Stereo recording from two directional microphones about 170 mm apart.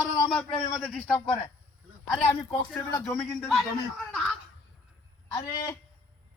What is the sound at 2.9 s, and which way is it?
Speech, 15° left (ahead or behind).